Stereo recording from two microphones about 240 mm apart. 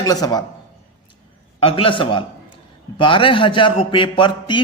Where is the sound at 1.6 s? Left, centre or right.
Left.